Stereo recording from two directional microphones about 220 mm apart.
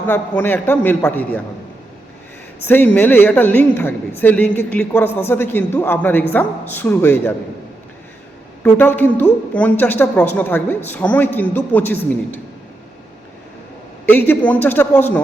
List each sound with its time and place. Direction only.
0.1 s a woman's voice: 10° left (ahead or behind)
2.6 s a woman's voice: 10° left (ahead or behind)
8.6 s a woman's voice: 10° left (ahead or behind)
14.1 s a woman's voice: 10° left (ahead or behind)